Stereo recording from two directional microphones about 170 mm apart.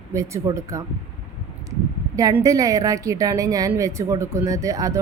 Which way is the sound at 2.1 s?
20° right (ahead or behind).